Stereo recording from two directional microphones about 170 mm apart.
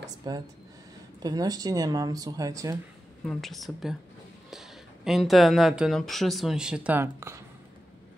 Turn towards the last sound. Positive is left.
turn(degrees=-15)  # may be behind; listen again after turning